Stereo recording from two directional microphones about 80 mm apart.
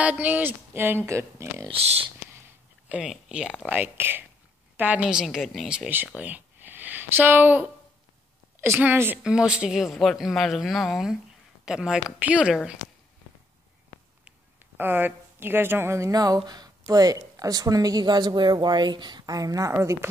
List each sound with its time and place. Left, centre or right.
0.0 s speech: centre; by 1.7 s right
3.1 s speech: centre
3.6 s a woman's voice: right
5.0 s speech: centre
6.1 s a sound: right
8.5 s speech: right
9.2 s speech: centre
14.2 s a sound: right
16.1 s a woman's voice: right
19.7 s speech: right